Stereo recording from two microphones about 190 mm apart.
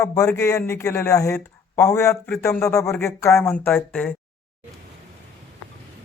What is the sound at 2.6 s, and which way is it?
Speech, 15° left (ahead or behind).